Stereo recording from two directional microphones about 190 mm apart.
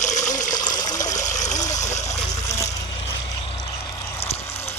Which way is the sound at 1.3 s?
40° left (ahead or behind).